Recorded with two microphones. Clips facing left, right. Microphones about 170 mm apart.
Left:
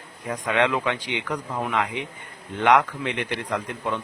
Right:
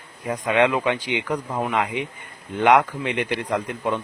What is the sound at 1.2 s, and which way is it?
Speech, 25° right (ahead or behind).